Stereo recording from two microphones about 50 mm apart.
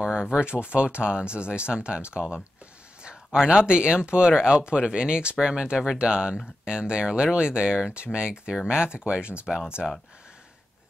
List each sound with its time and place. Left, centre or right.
0.0 s speech: centre
3.4 s speech: centre